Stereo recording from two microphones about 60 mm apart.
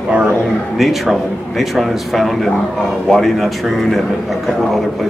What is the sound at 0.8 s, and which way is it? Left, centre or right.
A man's voice, centre.